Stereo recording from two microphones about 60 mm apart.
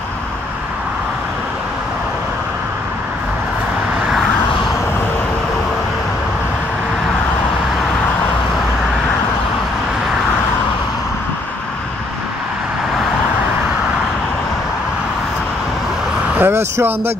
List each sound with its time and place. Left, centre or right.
16.3 s vehicle: right